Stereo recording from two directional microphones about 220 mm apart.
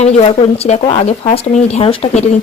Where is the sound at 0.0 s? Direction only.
25° left (ahead or behind).